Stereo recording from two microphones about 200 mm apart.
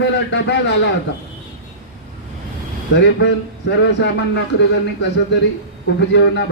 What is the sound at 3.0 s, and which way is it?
Speech, 60° left (ahead or behind).